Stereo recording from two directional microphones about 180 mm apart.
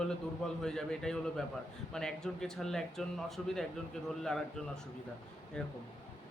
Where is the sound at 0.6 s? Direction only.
5° left (ahead or behind).